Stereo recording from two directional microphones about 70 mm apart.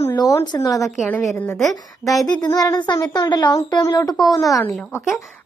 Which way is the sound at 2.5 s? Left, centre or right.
Left.